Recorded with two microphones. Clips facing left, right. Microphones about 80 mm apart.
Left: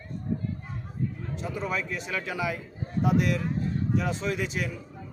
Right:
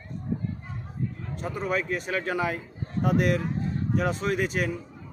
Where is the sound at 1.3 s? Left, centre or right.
Right.